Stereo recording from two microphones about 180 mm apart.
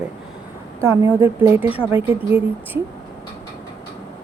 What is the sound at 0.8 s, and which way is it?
A woman's voice, 15° right (ahead or behind).